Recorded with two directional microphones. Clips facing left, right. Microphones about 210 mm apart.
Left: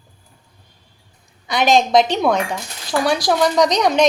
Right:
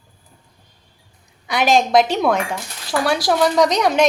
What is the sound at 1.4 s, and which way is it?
Speech, 5° right (ahead or behind).